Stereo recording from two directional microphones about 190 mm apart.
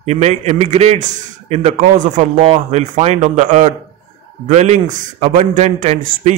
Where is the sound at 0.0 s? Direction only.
35° right (ahead or behind).